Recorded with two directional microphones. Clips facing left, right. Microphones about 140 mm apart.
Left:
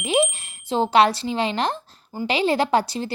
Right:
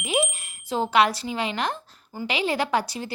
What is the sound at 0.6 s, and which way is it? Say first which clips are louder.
A woman's voice: left 4 dB; 25° left (ahead or behind).